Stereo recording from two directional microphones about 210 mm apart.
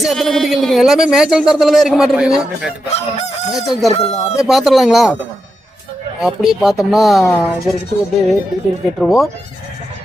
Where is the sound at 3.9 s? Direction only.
30° left (ahead or behind).